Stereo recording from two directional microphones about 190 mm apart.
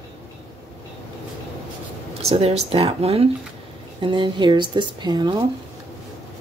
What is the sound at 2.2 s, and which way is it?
Speech, 35° right (ahead or behind).